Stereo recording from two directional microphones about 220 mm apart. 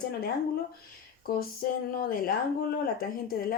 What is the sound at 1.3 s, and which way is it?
Speech, 40° left (ahead or behind).